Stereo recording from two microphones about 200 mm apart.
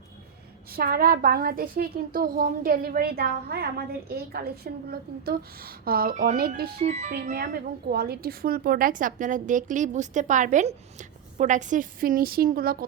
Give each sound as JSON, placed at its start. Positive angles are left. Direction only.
{"t": 0.7, "sound": "a woman's voice", "side_deg": -50}
{"t": 6.7, "sound": "a woman's voice", "side_deg": -35}
{"t": 7.1, "sound": "a woman's voice", "side_deg": -50}